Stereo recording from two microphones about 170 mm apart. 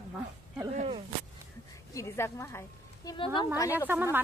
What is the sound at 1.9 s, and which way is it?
Speech, 15° left (ahead or behind).